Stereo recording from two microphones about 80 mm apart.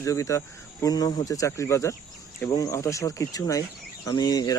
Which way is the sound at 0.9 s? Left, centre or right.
Left.